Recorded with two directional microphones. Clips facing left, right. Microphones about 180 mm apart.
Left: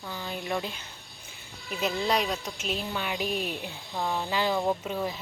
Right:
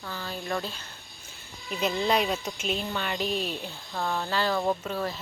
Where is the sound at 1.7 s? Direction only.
Centre (ahead or behind).